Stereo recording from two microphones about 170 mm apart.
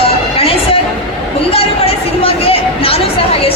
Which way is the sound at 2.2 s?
35° left (ahead or behind).